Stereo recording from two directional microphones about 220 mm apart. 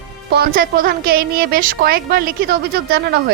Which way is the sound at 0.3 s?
45° right (ahead or behind).